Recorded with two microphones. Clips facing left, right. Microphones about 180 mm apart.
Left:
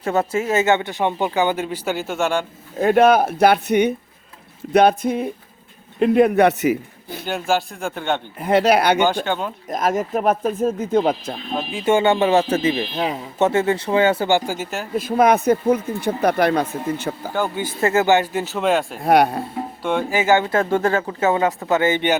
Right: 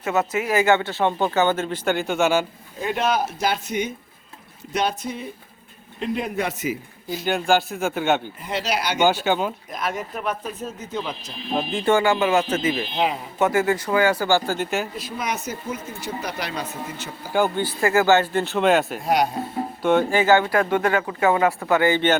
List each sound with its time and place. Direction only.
0.0 s speech: 30° left (ahead or behind); by 2.5 s 5° right (ahead or behind)
2.8 s speech: 55° left (ahead or behind)
7.3 s a man's voice: centre (ahead or behind)
8.4 s speech: 55° left (ahead or behind)
9.2 s speech: 5° right (ahead or behind)
9.6 s speech: 45° left (ahead or behind)
11.9 s a man's voice: 25° left (ahead or behind); by 14.7 s 10° left (ahead or behind)
14.9 s speech: 55° left (ahead or behind)
17.3 s speech: 10° right (ahead or behind)
17.7 s speech: 20° left (ahead or behind)
18.4 s a man's voice: centre (ahead or behind)
19.0 s speech: 60° left (ahead or behind)
19.8 s a man's voice: centre (ahead or behind)
20.1 s a man's voice: 20° left (ahead or behind)